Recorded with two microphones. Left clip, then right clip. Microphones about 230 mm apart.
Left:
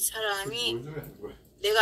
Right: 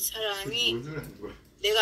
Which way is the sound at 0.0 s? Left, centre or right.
Left.